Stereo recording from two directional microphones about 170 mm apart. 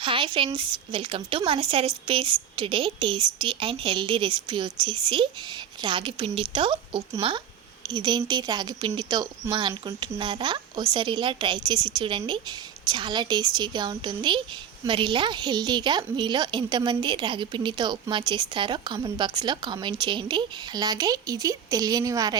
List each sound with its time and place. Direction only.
0.0 s a woman's voice: 30° right (ahead or behind)